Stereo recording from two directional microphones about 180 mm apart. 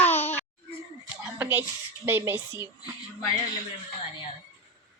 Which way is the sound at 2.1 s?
10° right (ahead or behind).